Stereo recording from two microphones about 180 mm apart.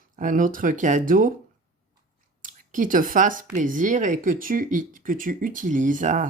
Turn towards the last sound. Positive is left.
turn(degrees=-45)  # may be behind; listen again after turning